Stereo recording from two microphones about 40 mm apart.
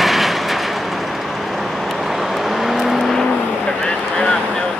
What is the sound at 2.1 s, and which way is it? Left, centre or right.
Vehicle, centre.